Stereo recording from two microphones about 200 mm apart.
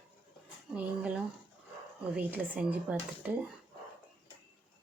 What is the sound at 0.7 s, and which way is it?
Speech, 5° right (ahead or behind).